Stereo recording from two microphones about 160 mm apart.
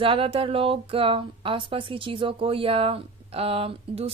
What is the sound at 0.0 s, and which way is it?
A woman's voice, 35° right (ahead or behind).